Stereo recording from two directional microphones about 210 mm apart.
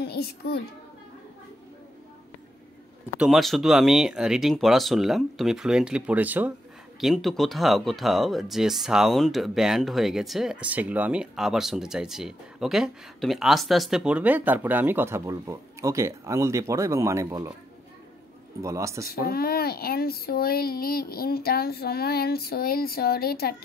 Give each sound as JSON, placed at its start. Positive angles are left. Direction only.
{"t": 0.0, "sound": "a child's voice", "side_deg": 50}
{"t": 3.2, "sound": "speech", "side_deg": 0}
{"t": 18.6, "sound": "speech", "side_deg": -15}
{"t": 19.2, "sound": "speech", "side_deg": 45}